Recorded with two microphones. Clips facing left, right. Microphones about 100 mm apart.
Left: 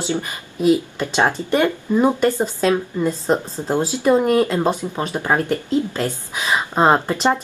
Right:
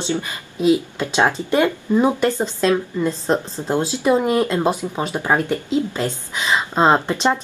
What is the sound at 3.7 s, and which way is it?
Speech, 15° right (ahead or behind).